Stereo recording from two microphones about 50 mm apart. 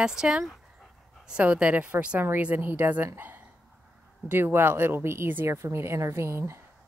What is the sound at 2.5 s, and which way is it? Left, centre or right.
A woman's voice, right.